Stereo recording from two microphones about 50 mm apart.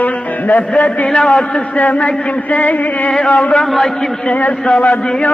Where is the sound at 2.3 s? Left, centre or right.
Left.